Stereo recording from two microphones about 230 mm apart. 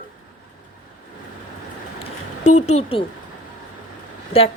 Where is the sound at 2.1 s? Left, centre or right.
Left.